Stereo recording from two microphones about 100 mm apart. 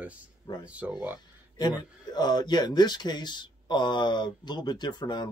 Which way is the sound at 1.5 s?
45° left (ahead or behind).